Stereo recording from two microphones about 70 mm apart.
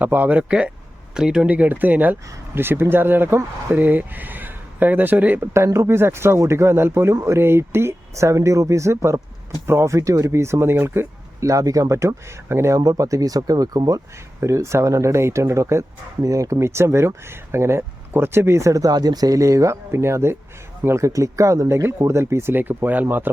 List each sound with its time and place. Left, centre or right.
0.0 s speech: right
1.5 s speech: right
5.4 s speech: right
11.4 s speech: right
14.4 s speech: right